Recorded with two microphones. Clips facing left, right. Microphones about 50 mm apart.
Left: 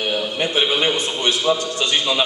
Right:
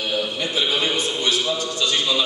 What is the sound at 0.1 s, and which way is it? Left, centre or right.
A man's voice, left.